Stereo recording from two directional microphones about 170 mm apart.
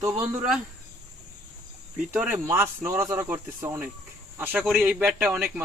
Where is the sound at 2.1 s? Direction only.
10° right (ahead or behind).